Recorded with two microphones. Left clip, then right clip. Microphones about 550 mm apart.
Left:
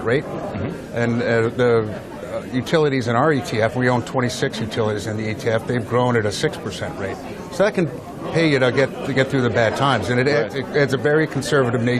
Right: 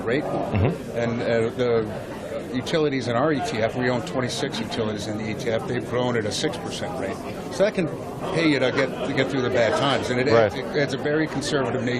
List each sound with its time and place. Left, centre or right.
0.9 s speech: left
7.6 s speech: left